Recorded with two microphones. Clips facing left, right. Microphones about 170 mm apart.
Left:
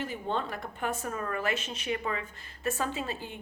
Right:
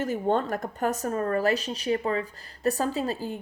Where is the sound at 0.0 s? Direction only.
45° right (ahead or behind).